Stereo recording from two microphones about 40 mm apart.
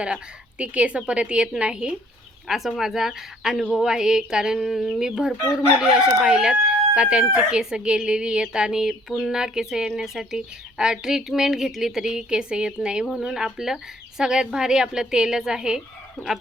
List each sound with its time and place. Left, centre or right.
0.6 s speech: right
2.5 s chicken: centre
4.6 s chicken: centre; by 7.3 s right
7.6 s speech: centre
9.3 s chicken: centre
10.3 s chicken: centre
11.7 s speech: centre
13.1 s chicken: centre